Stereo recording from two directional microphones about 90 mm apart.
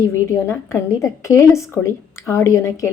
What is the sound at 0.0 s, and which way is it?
A woman's voice, 35° left (ahead or behind).